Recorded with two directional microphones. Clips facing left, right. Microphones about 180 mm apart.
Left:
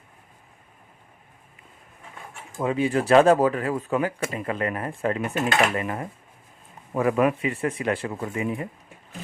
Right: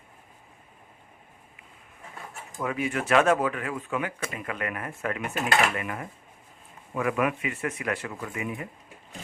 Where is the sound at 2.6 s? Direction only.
30° left (ahead or behind).